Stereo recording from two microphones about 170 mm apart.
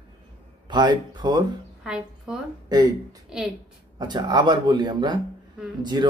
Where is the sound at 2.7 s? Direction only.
25° right (ahead or behind).